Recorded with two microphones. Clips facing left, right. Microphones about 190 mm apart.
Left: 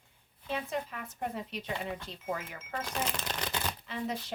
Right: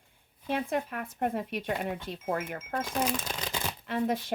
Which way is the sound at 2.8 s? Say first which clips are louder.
Right 5 dB; 5° right (ahead or behind).